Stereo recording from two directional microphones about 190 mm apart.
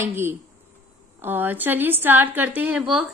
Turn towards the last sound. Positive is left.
turn(degrees=-5)  # may be behind; listen again after turning